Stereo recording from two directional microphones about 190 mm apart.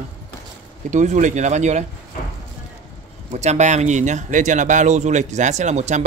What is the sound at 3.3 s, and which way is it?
Speech, 35° right (ahead or behind).